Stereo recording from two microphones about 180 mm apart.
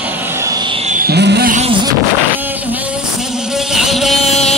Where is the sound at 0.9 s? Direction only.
55° right (ahead or behind).